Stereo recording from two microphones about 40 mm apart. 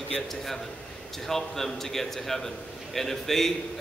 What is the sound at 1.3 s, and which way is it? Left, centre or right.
A man's voice, centre.